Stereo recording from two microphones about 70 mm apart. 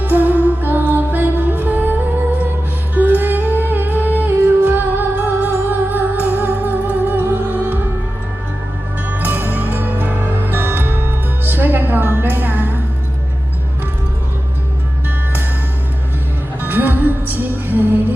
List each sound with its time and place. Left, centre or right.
0.0 s music: right
9.0 s music: right
16.6 s music: right